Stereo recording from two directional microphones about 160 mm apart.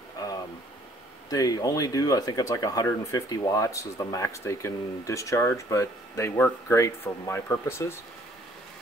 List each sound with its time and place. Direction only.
1.3 s speech: 25° left (ahead or behind)